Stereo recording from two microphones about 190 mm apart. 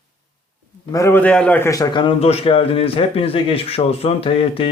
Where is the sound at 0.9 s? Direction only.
15° left (ahead or behind).